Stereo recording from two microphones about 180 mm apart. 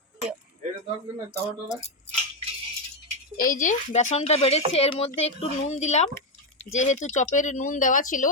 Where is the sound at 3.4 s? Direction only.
50° left (ahead or behind).